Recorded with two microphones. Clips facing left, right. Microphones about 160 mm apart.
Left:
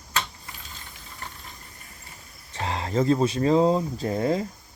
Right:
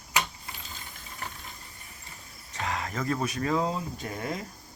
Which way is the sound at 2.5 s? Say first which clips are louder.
Left 7 dB; 30° left (ahead or behind).